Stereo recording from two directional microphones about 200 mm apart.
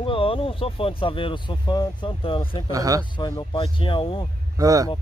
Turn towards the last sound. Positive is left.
turn(degrees=-15)  # may be behind; listen again after turning